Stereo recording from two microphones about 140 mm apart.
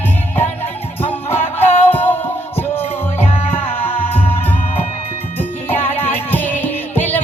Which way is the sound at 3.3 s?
45° left (ahead or behind).